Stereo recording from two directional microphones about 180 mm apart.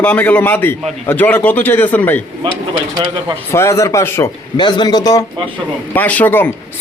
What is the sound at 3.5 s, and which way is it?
A man's voice, 15° left (ahead or behind).